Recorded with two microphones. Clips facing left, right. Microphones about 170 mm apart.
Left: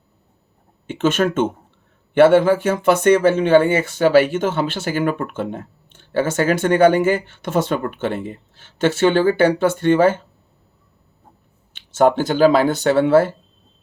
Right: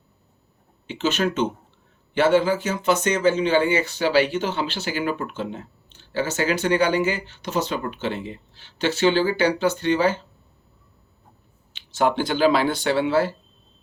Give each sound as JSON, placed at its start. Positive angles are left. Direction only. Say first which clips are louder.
{"t": 0.9, "sound": "speech", "louder": "left 5 dB", "side_deg": 50}
{"t": 11.7, "sound": "speech", "louder": "left 6 dB", "side_deg": 45}